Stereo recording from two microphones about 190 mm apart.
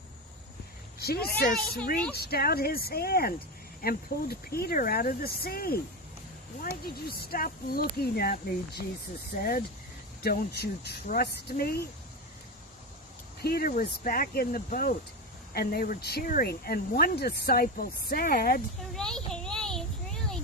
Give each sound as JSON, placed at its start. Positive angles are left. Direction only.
{"t": 0.9, "sound": "speech", "side_deg": 55}
{"t": 13.4, "sound": "speech", "side_deg": 55}
{"t": 18.9, "sound": "a sound", "side_deg": 5}